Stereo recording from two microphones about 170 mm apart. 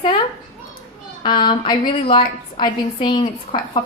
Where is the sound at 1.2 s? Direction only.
25° left (ahead or behind).